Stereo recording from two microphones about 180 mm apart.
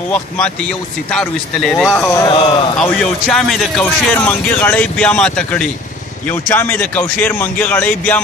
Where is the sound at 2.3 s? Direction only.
30° left (ahead or behind).